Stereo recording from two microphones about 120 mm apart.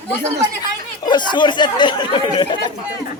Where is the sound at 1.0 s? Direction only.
40° left (ahead or behind).